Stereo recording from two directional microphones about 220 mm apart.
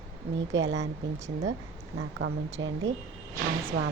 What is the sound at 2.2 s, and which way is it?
Speech, 65° right (ahead or behind).